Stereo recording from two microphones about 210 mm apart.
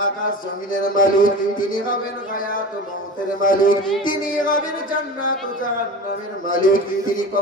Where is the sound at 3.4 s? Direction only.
40° left (ahead or behind).